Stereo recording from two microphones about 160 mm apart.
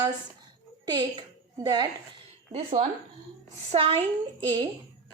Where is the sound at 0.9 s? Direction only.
25° right (ahead or behind).